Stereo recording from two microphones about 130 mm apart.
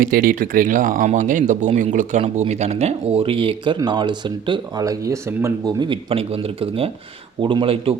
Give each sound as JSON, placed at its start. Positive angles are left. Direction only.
{"t": 0.0, "sound": "speech", "side_deg": -90}
{"t": 5.8, "sound": "speech", "side_deg": -40}